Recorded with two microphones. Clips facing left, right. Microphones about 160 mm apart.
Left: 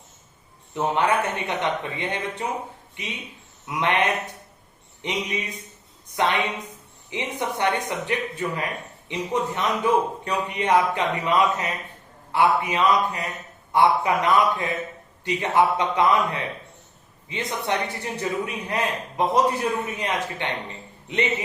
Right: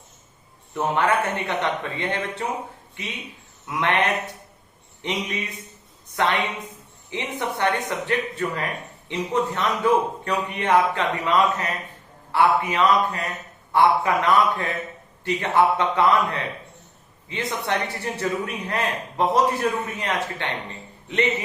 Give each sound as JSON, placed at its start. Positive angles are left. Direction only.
{"t": 0.7, "sound": "a man's voice", "side_deg": 15}
{"t": 3.7, "sound": "a man's voice", "side_deg": 15}